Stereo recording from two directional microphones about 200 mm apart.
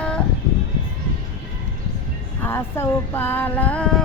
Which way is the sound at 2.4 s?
10° left (ahead or behind).